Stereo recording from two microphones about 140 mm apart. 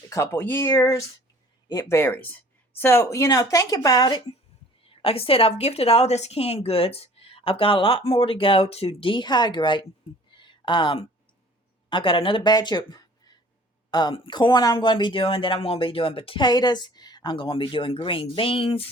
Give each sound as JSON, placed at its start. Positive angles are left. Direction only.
{"t": 0.1, "sound": "a woman's voice", "side_deg": 20}
{"t": 4.8, "sound": "a woman's voice", "side_deg": 40}
{"t": 10.3, "sound": "a sound", "side_deg": 35}
{"t": 11.9, "sound": "a woman's voice", "side_deg": 35}